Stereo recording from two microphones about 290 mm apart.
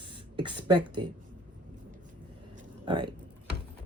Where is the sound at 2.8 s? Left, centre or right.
Centre.